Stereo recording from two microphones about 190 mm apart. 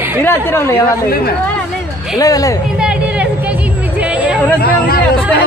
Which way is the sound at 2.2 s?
20° left (ahead or behind).